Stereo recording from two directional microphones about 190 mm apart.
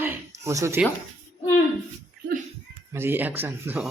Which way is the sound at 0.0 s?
15° right (ahead or behind).